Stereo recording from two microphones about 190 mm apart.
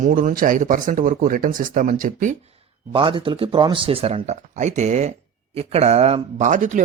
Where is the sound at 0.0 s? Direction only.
45° right (ahead or behind).